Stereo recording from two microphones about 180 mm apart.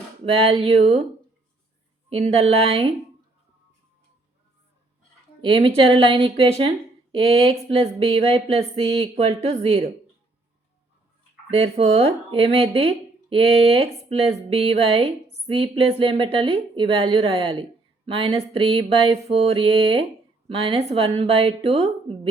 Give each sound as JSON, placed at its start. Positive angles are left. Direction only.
{"t": 0.4, "sound": "a woman's voice", "side_deg": -35}
{"t": 2.0, "sound": "a woman's voice", "side_deg": -35}
{"t": 5.4, "sound": "a woman's voice", "side_deg": -30}
{"t": 11.5, "sound": "a woman's voice", "side_deg": -35}